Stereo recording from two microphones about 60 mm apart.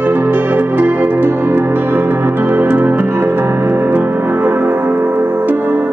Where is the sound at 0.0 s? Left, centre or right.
Right.